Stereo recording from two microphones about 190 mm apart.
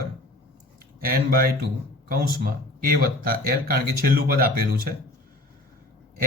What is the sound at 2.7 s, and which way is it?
Speech, 50° right (ahead or behind).